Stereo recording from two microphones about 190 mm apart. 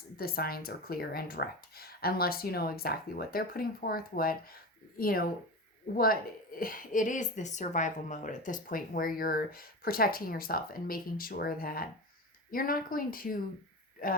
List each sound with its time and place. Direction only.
0.2 s speech: 50° left (ahead or behind)
6.6 s speech: 45° left (ahead or behind)